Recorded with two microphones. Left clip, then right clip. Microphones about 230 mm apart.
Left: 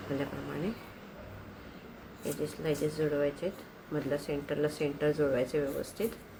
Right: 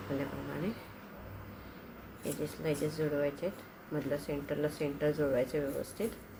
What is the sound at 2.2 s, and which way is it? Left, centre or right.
Speech, centre.